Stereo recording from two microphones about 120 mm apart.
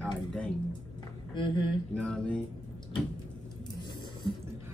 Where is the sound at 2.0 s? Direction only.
10° left (ahead or behind).